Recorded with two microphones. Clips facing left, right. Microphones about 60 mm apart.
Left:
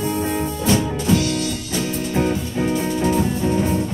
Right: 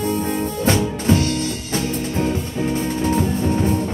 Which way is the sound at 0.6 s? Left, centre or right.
Right.